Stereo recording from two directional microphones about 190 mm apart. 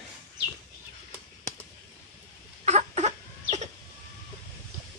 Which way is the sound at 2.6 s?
35° right (ahead or behind).